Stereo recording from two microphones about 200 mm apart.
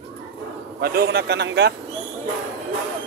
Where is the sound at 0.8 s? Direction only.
55° right (ahead or behind).